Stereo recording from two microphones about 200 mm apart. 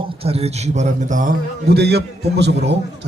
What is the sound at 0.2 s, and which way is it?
A man's voice, 30° right (ahead or behind).